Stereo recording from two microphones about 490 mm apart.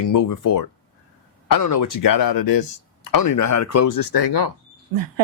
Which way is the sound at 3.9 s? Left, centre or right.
Left.